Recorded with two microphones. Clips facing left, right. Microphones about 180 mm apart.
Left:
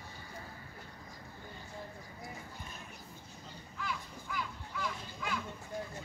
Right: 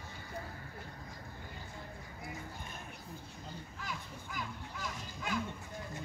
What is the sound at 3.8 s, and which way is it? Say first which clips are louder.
Children playing: left 5 dB; 45° right (ahead or behind).